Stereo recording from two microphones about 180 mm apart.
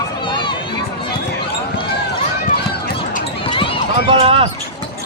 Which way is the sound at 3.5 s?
30° left (ahead or behind).